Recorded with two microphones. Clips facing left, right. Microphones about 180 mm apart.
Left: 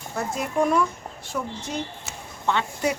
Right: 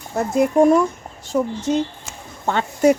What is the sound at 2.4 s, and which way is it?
Speech, 45° right (ahead or behind).